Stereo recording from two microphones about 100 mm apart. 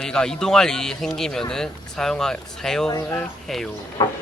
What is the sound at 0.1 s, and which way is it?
Speech, 5° left (ahead or behind).